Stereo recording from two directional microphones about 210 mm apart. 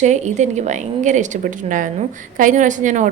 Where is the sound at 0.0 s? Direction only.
35° right (ahead or behind).